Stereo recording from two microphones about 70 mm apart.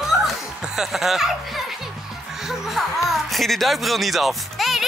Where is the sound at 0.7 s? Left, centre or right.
Centre.